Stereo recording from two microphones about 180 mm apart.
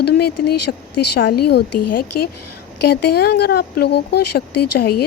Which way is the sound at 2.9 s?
65° left (ahead or behind).